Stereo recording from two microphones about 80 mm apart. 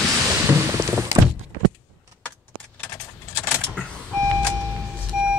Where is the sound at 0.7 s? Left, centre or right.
Right.